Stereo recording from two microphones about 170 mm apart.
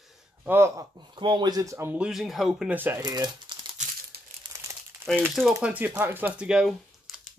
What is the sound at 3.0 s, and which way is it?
Speech, 25° right (ahead or behind).